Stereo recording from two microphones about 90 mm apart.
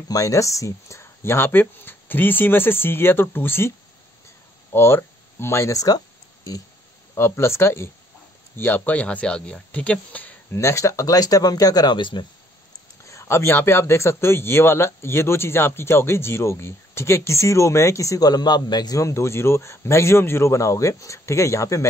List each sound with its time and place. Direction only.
0.1 s a man's voice: 35° left (ahead or behind)
4.7 s speech: 30° left (ahead or behind); by 6.6 s 45° left (ahead or behind)
7.2 s a man's voice: 30° left (ahead or behind)
10.5 s speech: 30° left (ahead or behind); by 12.3 s 60° left (ahead or behind)
13.0 s a man's voice: 30° left (ahead or behind); by 18.9 s 50° left (ahead or behind)
18.9 s speech: 35° left (ahead or behind)